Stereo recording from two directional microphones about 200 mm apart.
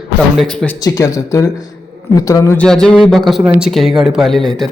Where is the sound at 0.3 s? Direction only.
5° left (ahead or behind).